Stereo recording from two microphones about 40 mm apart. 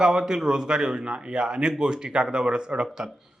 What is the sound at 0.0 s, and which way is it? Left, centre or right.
A man's voice, centre.